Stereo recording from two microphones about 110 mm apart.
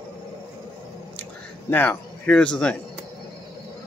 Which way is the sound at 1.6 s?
15° left (ahead or behind).